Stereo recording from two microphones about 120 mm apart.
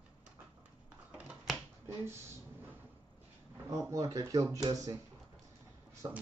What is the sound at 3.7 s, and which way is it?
Speech, 25° right (ahead or behind).